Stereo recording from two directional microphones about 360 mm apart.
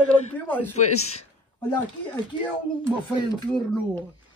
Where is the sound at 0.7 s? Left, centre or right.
Left.